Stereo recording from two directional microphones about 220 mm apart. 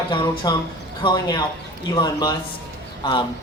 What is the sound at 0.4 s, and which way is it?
A man's voice, 20° left (ahead or behind).